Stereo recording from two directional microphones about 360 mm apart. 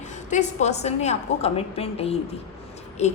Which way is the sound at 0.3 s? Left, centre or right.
Centre.